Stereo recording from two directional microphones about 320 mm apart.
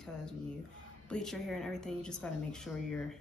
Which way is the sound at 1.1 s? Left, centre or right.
Centre.